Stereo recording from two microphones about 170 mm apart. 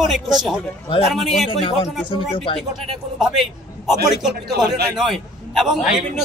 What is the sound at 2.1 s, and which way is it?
Speech, 30° left (ahead or behind).